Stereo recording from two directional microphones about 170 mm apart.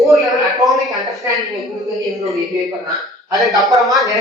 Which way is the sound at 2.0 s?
Centre (ahead or behind).